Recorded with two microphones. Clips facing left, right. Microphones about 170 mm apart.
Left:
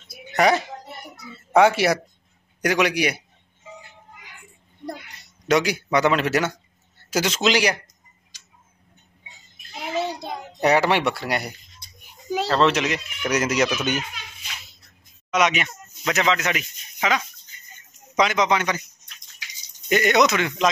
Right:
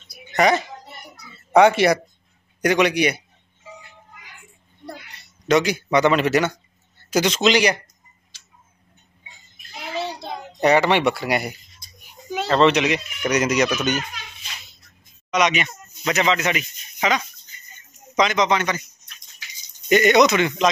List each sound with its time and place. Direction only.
0.3 s a sound: 5° left (ahead or behind)
1.5 s a child's voice: 5° left (ahead or behind)
5.5 s a child's voice: 10° left (ahead or behind)
9.8 s child singing: 15° left (ahead or behind)
10.2 s a child's voice: 5° left (ahead or behind)
15.3 s a child's voice: 5° left (ahead or behind)
19.9 s a child's voice: centre (ahead or behind)